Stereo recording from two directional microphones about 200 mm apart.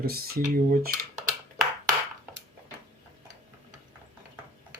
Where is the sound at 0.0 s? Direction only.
50° right (ahead or behind).